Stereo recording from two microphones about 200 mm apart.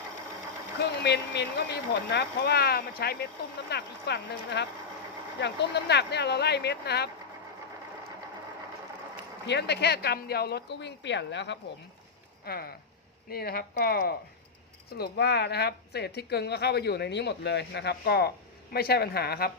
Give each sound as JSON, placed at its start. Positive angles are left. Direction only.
{"t": 0.8, "sound": "a woman's voice", "side_deg": 55}
{"t": 9.5, "sound": "a woman's voice", "side_deg": 55}
{"t": 12.5, "sound": "a woman's voice", "side_deg": 50}